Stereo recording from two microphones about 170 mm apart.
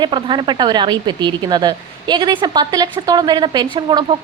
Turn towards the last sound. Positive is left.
turn(degrees=-25)  # may be behind; listen again after turning